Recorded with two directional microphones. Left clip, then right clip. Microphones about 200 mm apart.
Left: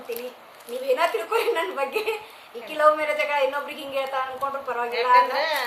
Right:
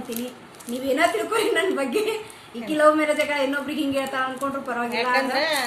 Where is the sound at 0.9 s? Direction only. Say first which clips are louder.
Right 3 dB; centre (ahead or behind).